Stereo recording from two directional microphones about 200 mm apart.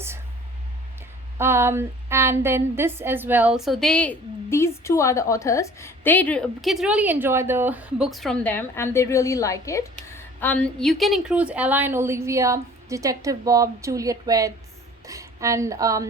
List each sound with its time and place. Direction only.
1.4 s a woman's voice: 10° right (ahead or behind)